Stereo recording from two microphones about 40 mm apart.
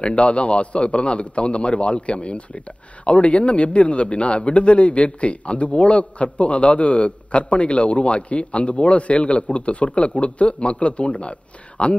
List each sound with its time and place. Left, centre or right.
0.0 s a man's voice: left